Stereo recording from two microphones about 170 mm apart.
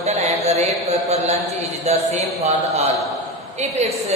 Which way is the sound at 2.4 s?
40° right (ahead or behind).